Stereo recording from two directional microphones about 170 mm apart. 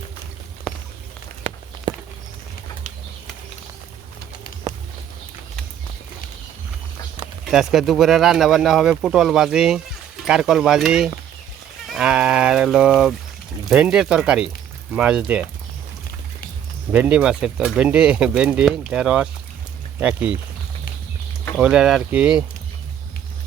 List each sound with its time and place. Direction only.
1.9 s walk: 25° right (ahead or behind)
7.5 s speech: centre (ahead or behind)
16.9 s speech: 5° right (ahead or behind)
21.6 s speech: 5° right (ahead or behind)